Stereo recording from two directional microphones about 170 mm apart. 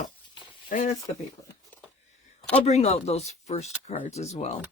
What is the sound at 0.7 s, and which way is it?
Speech, 45° left (ahead or behind).